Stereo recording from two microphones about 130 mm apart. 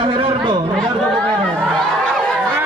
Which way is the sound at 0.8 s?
5° left (ahead or behind).